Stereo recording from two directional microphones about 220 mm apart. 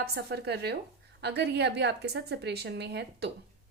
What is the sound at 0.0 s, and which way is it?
A woman's voice, 45° right (ahead or behind).